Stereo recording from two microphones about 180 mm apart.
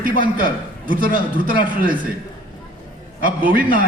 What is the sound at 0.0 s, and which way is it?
A man's voice, 50° right (ahead or behind).